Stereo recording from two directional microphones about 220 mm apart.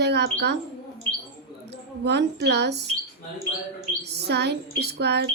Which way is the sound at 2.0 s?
50° right (ahead or behind).